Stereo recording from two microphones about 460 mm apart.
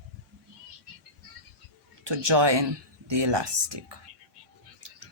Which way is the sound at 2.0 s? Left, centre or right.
Right.